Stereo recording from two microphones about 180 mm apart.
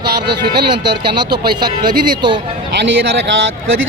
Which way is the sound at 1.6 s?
25° right (ahead or behind).